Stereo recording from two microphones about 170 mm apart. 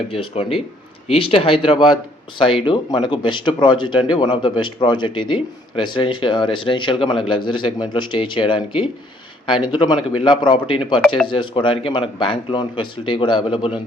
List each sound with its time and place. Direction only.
0.1 s a man's voice: 35° left (ahead or behind)